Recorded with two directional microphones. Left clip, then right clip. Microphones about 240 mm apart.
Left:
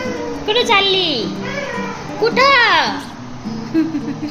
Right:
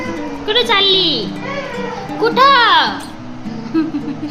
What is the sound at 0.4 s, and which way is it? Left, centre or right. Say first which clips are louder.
Speech: right 1 dB; centre.